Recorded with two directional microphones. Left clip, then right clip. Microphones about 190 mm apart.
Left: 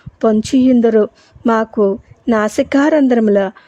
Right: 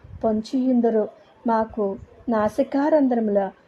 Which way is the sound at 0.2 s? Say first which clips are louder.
Left 10 dB; 45° left (ahead or behind).